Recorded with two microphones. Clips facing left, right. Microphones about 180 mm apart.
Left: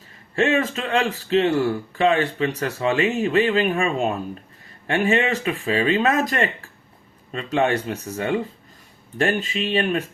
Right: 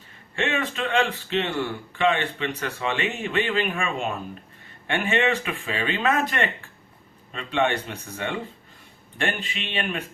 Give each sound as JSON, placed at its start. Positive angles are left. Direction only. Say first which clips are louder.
{"t": 0.3, "sound": "a man's voice", "louder": "left 6 dB", "side_deg": 40}